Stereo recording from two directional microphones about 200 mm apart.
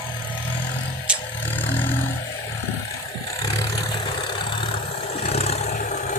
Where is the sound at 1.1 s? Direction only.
5° right (ahead or behind).